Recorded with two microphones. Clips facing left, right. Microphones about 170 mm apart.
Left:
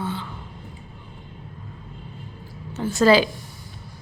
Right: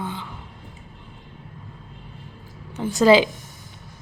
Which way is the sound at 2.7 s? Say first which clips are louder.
Right 1 dB; 15° right (ahead or behind).